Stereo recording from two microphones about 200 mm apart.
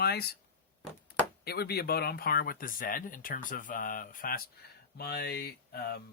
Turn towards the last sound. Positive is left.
turn(degrees=50)  # may be behind; listen again after turning